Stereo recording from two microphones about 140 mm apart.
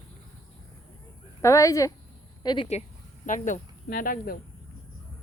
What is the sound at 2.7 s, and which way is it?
Speech, 60° left (ahead or behind).